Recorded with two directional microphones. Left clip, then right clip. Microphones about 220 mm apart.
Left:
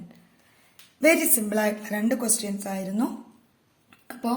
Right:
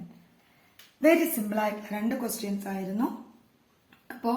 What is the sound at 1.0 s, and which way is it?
A woman's voice, 50° left (ahead or behind).